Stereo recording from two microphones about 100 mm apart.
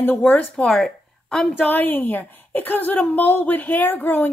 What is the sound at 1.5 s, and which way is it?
Speech, 20° left (ahead or behind).